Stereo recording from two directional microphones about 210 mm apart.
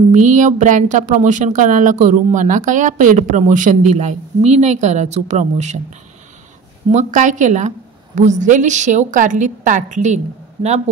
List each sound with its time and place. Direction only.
0.1 s a woman's voice: 35° right (ahead or behind)
6.9 s a woman's voice: 35° right (ahead or behind)